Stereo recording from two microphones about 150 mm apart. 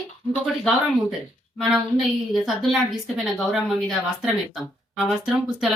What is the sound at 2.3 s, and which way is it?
Speech, centre (ahead or behind).